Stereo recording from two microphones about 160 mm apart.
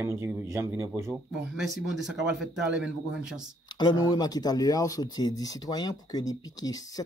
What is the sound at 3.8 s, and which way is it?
Speech, 25° left (ahead or behind).